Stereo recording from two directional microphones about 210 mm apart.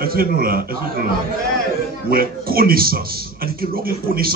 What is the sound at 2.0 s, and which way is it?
A man's voice, 45° right (ahead or behind).